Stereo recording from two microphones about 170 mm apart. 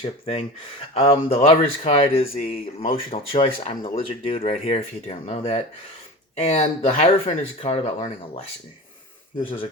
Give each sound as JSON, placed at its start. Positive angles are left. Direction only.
{"t": 0.0, "sound": "speech", "side_deg": 35}